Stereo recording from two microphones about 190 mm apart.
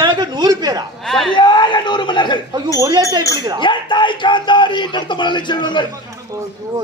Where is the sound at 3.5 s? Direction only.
25° left (ahead or behind).